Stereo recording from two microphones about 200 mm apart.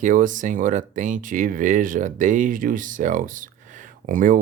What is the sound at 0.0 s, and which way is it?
Speech, 40° right (ahead or behind).